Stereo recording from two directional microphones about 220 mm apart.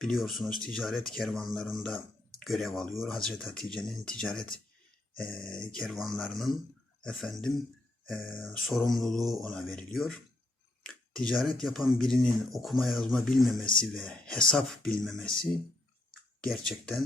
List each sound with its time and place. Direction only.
0.0 s speech: centre (ahead or behind)